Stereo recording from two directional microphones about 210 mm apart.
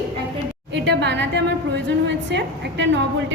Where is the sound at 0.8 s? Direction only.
55° right (ahead or behind).